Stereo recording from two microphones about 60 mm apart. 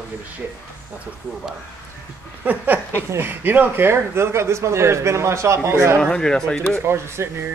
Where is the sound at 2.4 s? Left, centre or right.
Right.